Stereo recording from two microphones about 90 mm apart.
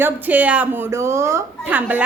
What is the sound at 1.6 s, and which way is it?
Speech, 20° right (ahead or behind).